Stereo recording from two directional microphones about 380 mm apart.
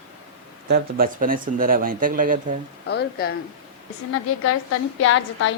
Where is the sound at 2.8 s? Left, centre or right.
Left.